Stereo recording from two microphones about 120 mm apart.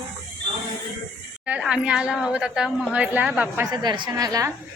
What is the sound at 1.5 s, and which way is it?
A woman's voice, 10° right (ahead or behind).